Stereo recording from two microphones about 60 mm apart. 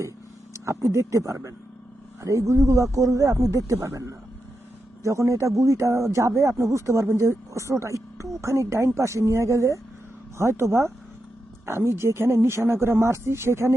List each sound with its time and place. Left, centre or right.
0.5 s speech: right
3.7 s speech: right